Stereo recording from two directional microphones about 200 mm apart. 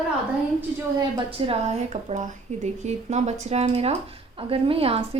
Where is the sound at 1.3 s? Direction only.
25° right (ahead or behind).